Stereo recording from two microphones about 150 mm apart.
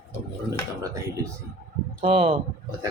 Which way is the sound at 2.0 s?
40° right (ahead or behind).